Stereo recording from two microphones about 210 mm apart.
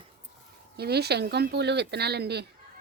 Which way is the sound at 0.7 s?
50° right (ahead or behind).